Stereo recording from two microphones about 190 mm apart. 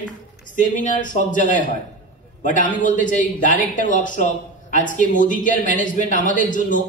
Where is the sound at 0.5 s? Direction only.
40° left (ahead or behind).